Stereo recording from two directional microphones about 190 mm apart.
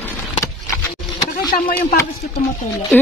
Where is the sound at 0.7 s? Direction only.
20° left (ahead or behind).